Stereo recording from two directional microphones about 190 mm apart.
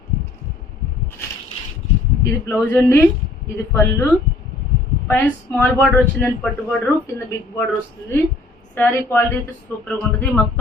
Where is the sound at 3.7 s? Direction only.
15° left (ahead or behind).